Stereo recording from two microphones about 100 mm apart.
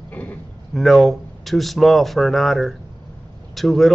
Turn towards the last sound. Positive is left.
turn(degrees=0)  # may be behind; listen again after turning